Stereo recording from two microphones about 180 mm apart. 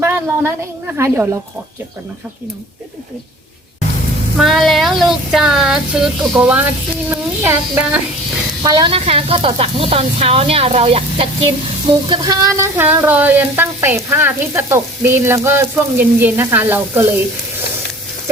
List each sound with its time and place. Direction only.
0.9 s frying: 15° right (ahead or behind)
4.4 s a sound: centre (ahead or behind)
7.1 s speech: 10° right (ahead or behind)
8.6 s a woman's voice: 25° right (ahead or behind)
12.0 s frying: 25° right (ahead or behind)